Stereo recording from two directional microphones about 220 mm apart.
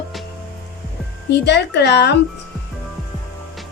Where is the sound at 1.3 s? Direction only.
50° left (ahead or behind).